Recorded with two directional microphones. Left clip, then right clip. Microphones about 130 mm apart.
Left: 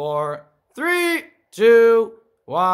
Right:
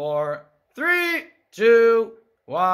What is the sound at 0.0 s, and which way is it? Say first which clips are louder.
Speech: left 1 dB; 35° left (ahead or behind).